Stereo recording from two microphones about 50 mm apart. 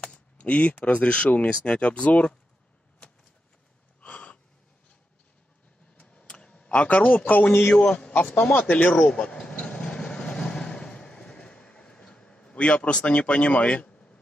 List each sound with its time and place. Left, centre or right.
0.0 s speech: left
4.0 s a sound: left
5.9 s a sound: left
7.7 s a man's voice: centre
8.5 s speech: left
9.1 s vehicle: centre